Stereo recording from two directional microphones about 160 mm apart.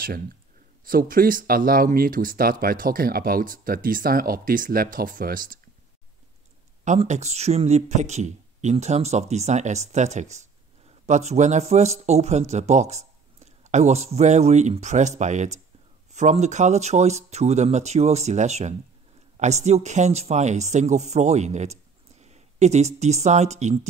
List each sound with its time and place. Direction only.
0.8 s speech: 60° right (ahead or behind)
7.0 s speech: 45° right (ahead or behind)